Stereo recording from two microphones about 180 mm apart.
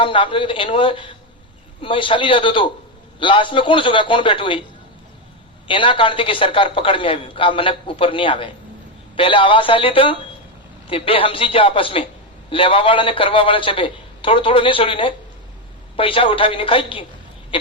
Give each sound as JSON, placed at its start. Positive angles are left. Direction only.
{"t": 0.0, "sound": "a man's voice", "side_deg": 30}
{"t": 5.6, "sound": "a man's voice", "side_deg": 30}
{"t": 17.5, "sound": "a sound", "side_deg": 30}